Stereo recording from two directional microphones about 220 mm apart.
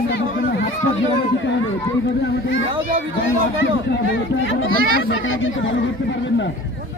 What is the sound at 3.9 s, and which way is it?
Speech, 50° left (ahead or behind).